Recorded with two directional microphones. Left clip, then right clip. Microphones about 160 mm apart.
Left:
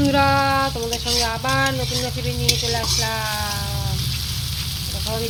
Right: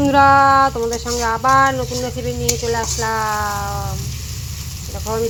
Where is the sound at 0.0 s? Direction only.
15° right (ahead or behind).